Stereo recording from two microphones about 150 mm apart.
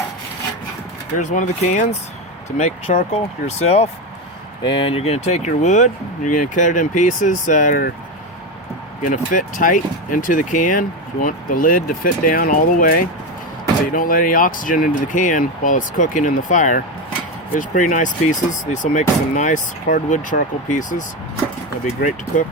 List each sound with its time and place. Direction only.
1.2 s speech: 55° left (ahead or behind)
4.6 s speech: 35° left (ahead or behind); by 7.9 s 60° left (ahead or behind)
9.0 s speech: 60° left (ahead or behind)